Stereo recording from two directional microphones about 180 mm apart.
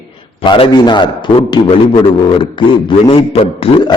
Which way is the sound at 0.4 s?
25° left (ahead or behind).